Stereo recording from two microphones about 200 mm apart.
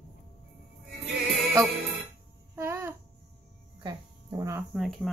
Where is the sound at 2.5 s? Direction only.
15° right (ahead or behind).